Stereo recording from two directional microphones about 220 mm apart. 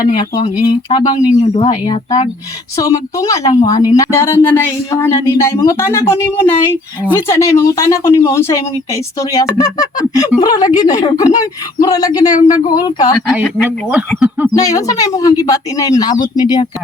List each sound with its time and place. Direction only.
0.0 s speech: 20° left (ahead or behind)
14.5 s speech: 15° left (ahead or behind)